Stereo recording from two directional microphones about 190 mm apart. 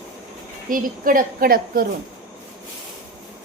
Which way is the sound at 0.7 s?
45° right (ahead or behind).